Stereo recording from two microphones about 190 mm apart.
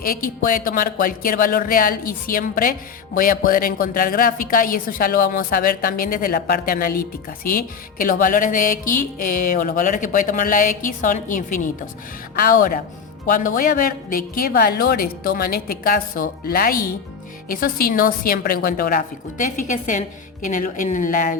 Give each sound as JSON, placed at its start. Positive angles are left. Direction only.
{"t": 0.0, "sound": "speech", "side_deg": 50}